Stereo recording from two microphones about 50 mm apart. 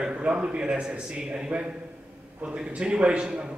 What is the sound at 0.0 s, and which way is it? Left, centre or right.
A man's voice, right.